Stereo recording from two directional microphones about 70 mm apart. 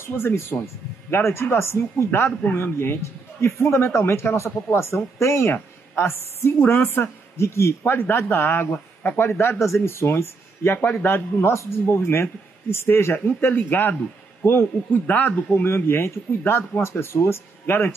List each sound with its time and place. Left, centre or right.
0.0 s speech: left
5.5 s a sound: left
6.4 s a man's voice: left
15.6 s speech: left